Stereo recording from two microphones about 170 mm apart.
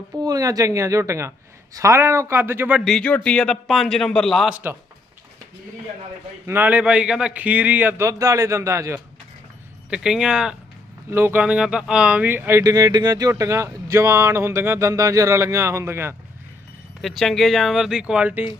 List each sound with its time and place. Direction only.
0.2 s speech: 20° right (ahead or behind)
2.8 s speech: 5° left (ahead or behind)
6.4 s speech: 10° right (ahead or behind)
9.9 s speech: 5° right (ahead or behind)
17.0 s speech: centre (ahead or behind)